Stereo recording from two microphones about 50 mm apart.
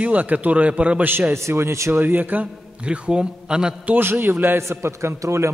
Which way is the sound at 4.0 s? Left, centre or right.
Right.